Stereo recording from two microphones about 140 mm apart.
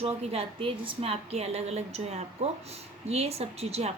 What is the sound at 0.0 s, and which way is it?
A woman's voice, 45° right (ahead or behind).